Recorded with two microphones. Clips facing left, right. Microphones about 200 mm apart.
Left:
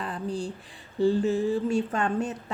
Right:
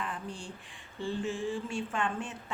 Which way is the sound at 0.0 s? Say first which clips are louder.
Left 8 dB; 35° left (ahead or behind).